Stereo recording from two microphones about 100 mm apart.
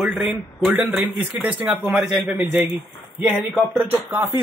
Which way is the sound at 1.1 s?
15° right (ahead or behind).